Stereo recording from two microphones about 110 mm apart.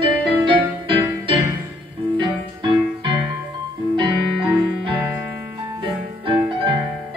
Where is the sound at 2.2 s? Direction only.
50° right (ahead or behind).